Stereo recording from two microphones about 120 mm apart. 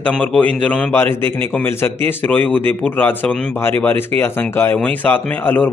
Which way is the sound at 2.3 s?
15° left (ahead or behind).